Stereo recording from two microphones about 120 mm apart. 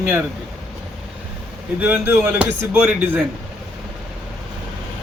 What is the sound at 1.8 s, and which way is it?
Speech, 15° right (ahead or behind).